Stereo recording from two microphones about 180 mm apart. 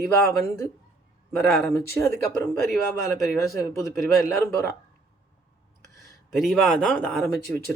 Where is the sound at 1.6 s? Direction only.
15° left (ahead or behind).